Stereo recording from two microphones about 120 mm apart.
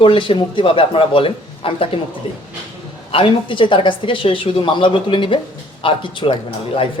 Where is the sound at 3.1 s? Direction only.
50° left (ahead or behind).